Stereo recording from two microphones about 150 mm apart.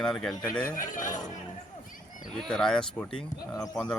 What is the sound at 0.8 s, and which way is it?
Speech, 60° left (ahead or behind).